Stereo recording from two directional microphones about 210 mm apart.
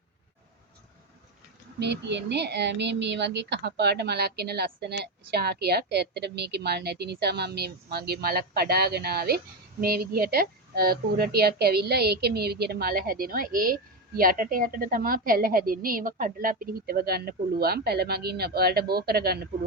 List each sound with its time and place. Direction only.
1.8 s speech: 55° right (ahead or behind)